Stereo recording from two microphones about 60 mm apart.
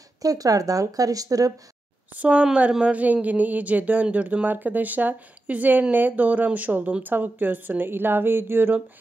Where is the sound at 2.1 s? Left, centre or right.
Right.